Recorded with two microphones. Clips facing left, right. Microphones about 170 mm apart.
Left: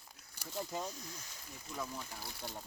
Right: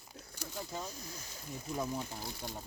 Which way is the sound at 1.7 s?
25° right (ahead or behind).